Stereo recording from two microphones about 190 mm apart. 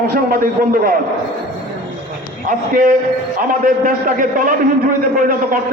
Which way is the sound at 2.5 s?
45° right (ahead or behind).